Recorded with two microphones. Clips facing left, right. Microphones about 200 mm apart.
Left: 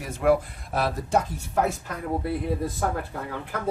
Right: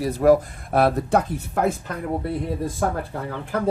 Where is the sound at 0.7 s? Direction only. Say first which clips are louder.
Right 7 dB; 60° right (ahead or behind).